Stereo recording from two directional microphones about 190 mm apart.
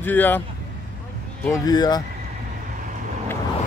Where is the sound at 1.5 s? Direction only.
20° left (ahead or behind).